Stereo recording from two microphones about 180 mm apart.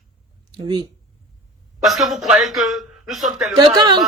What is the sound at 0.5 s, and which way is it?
Speech, 25° right (ahead or behind).